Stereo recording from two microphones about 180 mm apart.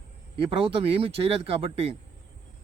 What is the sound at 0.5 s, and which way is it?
Speech, 30° right (ahead or behind).